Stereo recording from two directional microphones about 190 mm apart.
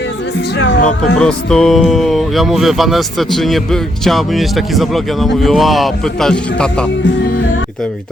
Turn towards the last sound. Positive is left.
turn(degrees=5)  # may be behind; listen again after turning